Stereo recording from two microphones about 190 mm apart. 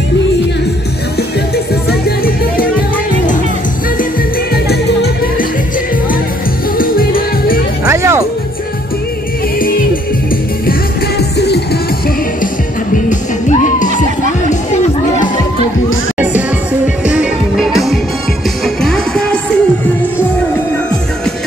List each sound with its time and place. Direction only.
2.0 s music: 50° left (ahead or behind)
4.6 s music: 60° left (ahead or behind)
6.8 s music: 50° left (ahead or behind)
7.8 s music: 15° right (ahead or behind)
10.7 s music: 60° left (ahead or behind)
13.5 s music: 40° left (ahead or behind)
16.2 s music: 5° right (ahead or behind)